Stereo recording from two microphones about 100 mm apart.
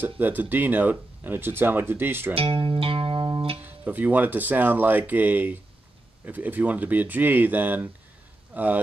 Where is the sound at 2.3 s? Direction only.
65° right (ahead or behind).